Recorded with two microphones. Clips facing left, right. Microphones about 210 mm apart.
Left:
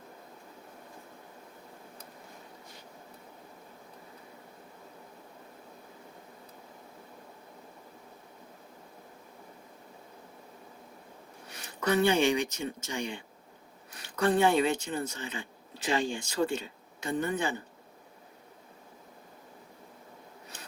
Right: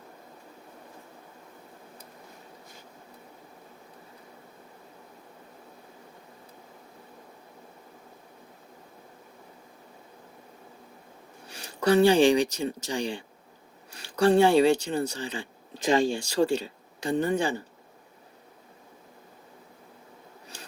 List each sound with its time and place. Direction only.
11.4 s speech: 30° right (ahead or behind)